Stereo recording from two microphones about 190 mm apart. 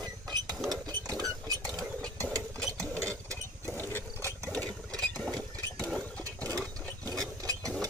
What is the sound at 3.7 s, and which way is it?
Ratchet, 10° left (ahead or behind).